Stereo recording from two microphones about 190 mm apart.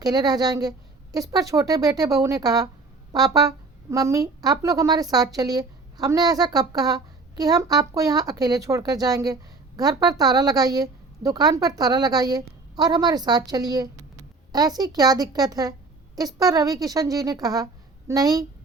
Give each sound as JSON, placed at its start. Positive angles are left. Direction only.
{"t": 0.0, "sound": "speech", "side_deg": -20}